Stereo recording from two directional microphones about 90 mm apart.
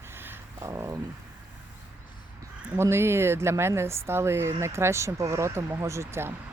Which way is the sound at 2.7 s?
30° right (ahead or behind).